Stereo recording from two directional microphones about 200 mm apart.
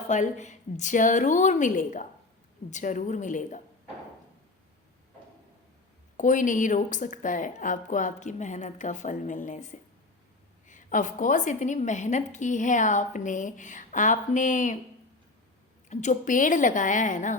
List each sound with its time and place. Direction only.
0.1 s a woman's voice: 35° left (ahead or behind)
6.1 s a woman's voice: 40° left (ahead or behind)
15.9 s a woman's voice: 35° left (ahead or behind)